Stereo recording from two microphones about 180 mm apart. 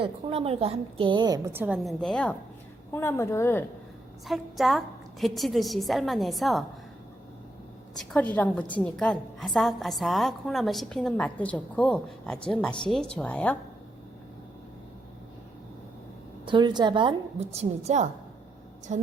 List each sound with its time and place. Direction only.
0.0 s a woman's voice: 30° right (ahead or behind)
1.5 s a woman's voice: 5° right (ahead or behind); by 3.6 s 15° left (ahead or behind)
4.3 s a woman's voice: centre (ahead or behind)
7.9 s a woman's voice: 5° left (ahead or behind)
16.5 s a woman's voice: 25° right (ahead or behind)
18.9 s music: 40° right (ahead or behind)